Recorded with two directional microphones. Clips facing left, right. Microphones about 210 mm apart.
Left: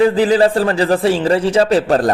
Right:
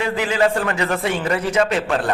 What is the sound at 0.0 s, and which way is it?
A man's voice, 35° left (ahead or behind).